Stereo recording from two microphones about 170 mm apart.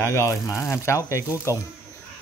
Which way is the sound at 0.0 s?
15° left (ahead or behind).